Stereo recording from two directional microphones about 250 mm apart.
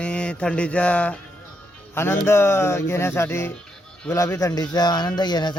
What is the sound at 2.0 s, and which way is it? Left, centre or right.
Speech, centre.